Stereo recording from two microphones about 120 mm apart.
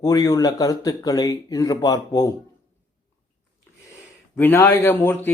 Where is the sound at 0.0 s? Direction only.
30° left (ahead or behind).